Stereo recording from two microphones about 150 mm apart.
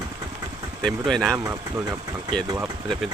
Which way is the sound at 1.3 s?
20° right (ahead or behind).